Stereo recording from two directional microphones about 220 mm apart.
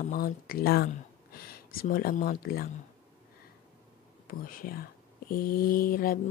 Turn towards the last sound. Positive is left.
turn(degrees=40)  # may be behind; listen again after turning